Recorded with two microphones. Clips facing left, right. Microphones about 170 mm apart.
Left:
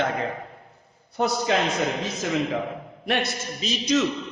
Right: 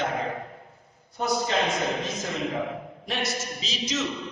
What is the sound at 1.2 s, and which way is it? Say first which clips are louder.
Speech: left 3 dB; 75° left (ahead or behind).